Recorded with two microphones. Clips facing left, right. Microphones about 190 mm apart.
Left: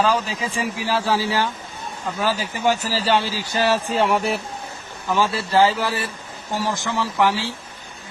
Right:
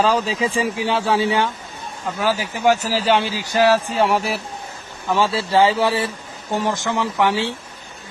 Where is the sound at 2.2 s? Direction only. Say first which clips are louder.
Right 2 dB; 10° right (ahead or behind).